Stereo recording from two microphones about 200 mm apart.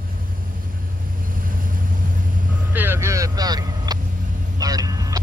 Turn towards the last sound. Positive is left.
turn(degrees=-20)  # may be behind; listen again after turning